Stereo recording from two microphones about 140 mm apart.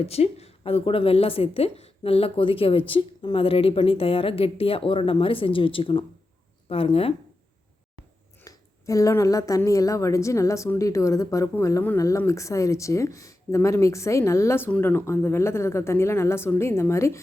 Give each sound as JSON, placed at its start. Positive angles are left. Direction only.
{"t": 0.0, "sound": "speech", "side_deg": 45}
{"t": 8.4, "sound": "a woman's voice", "side_deg": 25}